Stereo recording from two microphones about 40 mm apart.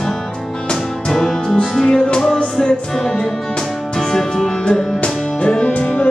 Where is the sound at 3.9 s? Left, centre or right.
Centre; by 6.1 s left.